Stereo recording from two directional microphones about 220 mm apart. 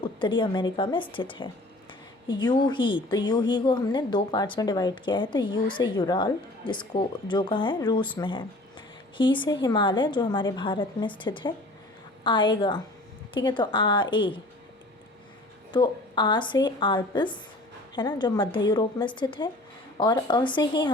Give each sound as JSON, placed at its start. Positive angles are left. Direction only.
{"t": 0.0, "sound": "a woman's voice", "side_deg": 20}
{"t": 15.7, "sound": "a woman's voice", "side_deg": 20}